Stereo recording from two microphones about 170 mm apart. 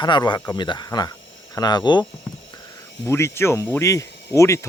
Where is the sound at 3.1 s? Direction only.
15° left (ahead or behind).